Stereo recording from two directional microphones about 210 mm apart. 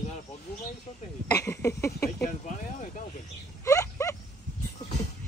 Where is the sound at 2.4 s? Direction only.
35° left (ahead or behind).